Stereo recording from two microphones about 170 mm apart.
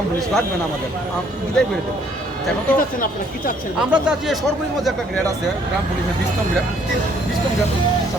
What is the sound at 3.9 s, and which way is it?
Speech, 5° right (ahead or behind).